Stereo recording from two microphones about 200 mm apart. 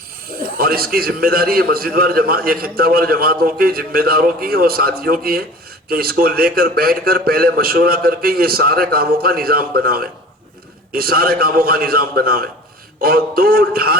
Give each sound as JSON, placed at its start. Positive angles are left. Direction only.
{"t": 0.6, "sound": "a man's voice", "side_deg": -50}